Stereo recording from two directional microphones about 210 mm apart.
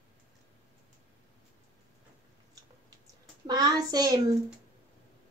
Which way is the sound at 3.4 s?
20° right (ahead or behind).